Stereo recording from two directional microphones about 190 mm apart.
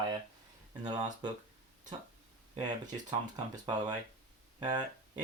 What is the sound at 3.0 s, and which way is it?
Speech, 20° right (ahead or behind).